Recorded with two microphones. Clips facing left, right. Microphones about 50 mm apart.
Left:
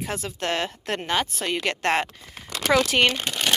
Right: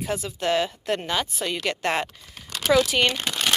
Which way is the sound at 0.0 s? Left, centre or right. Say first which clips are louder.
Right 2 dB; left.